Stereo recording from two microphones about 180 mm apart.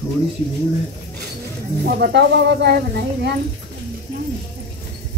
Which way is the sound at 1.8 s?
70° right (ahead or behind).